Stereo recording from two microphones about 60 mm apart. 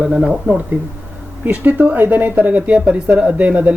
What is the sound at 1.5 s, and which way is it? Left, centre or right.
Speech, right.